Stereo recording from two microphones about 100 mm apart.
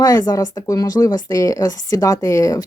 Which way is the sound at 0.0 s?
35° left (ahead or behind).